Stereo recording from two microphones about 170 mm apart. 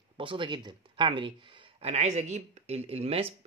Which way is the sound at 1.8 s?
40° right (ahead or behind).